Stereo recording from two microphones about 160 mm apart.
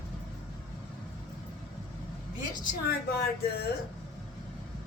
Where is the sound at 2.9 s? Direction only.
75° left (ahead or behind).